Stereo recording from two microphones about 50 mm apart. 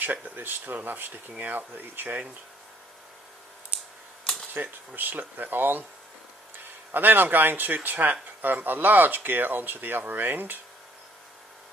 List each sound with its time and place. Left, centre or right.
0.0 s speech: right
3.7 s computer keyboard: right
4.2 s typewriter: centre
4.6 s speech: right
6.9 s speech: right